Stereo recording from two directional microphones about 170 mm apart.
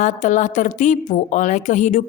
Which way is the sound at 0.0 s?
45° left (ahead or behind).